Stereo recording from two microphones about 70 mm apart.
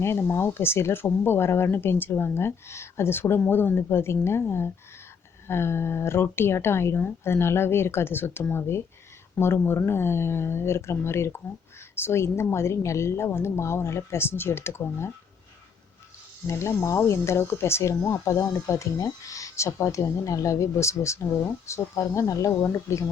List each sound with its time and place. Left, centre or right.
0.0 s speech: left
16.5 s speech: left
18.7 s speech: left